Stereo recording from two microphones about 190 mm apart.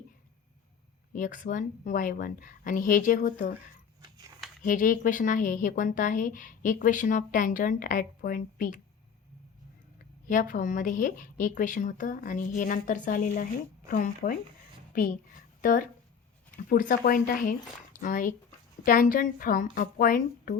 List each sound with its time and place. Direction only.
1.1 s a woman's voice: 45° left (ahead or behind)
4.6 s a woman's voice: 45° left (ahead or behind)
10.2 s a woman's voice: 45° left (ahead or behind)